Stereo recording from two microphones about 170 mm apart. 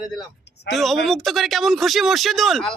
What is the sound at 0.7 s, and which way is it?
Speech, centre (ahead or behind).